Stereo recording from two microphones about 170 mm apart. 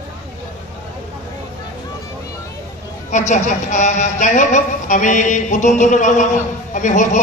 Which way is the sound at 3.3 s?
45° left (ahead or behind).